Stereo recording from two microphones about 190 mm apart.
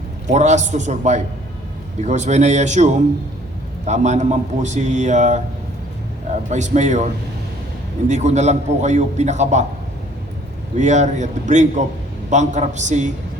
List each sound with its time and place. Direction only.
0.3 s a man's voice: 40° right (ahead or behind)
6.5 s a man's voice: 40° right (ahead or behind)
10.8 s a man's voice: 40° right (ahead or behind)